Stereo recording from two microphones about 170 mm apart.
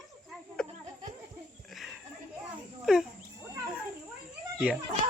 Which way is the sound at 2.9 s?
5° right (ahead or behind).